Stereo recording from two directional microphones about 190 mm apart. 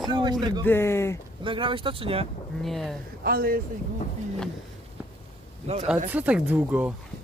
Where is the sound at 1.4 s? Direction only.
25° right (ahead or behind).